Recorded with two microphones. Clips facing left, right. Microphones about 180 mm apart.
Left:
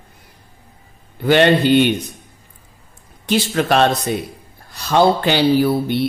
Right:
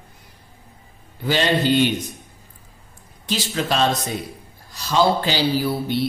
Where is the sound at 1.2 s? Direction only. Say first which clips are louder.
Left 6 dB; 60° left (ahead or behind).